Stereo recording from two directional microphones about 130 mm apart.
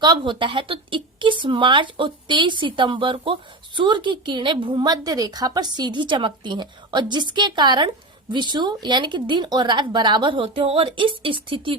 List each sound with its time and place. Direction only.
0.0 s a woman's voice: 35° right (ahead or behind)